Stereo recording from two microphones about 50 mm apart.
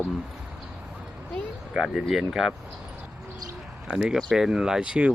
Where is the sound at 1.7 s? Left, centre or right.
Centre.